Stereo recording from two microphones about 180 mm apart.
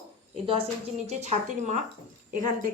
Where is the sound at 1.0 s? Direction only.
40° right (ahead or behind).